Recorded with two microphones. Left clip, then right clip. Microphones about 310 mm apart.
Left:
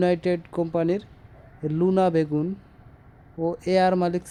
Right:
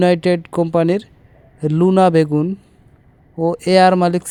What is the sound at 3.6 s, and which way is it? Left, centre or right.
Speech, centre.